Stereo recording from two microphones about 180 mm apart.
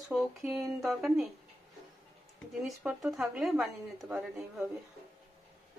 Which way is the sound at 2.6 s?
5° right (ahead or behind).